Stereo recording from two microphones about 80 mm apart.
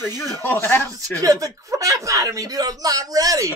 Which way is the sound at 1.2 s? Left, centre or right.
Right.